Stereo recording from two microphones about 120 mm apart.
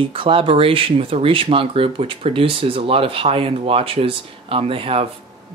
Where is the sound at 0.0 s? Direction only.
45° right (ahead or behind).